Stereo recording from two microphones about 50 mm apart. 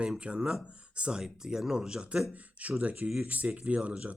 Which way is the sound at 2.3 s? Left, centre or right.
Right.